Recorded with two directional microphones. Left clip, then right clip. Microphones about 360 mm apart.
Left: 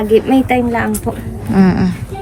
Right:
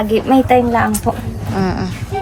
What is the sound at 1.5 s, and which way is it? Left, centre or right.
Speech, left.